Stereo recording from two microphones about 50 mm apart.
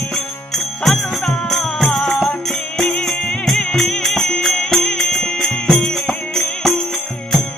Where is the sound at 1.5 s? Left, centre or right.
Centre.